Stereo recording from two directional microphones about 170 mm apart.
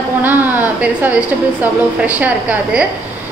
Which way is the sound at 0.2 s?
10° right (ahead or behind).